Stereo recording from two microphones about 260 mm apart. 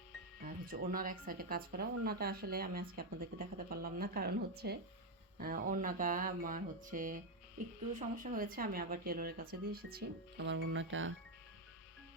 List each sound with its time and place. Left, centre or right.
0.4 s speech: right